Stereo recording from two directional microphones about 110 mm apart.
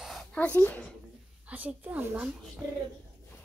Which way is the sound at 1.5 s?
15° right (ahead or behind).